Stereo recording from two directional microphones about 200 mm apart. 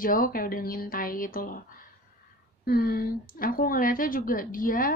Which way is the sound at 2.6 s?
50° left (ahead or behind).